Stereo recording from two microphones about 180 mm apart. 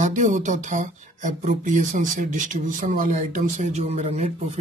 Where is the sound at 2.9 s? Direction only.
45° right (ahead or behind).